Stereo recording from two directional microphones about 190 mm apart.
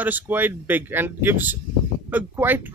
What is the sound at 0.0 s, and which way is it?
Speech, 10° right (ahead or behind).